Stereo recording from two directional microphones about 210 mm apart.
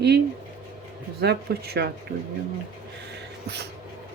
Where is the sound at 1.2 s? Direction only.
50° right (ahead or behind).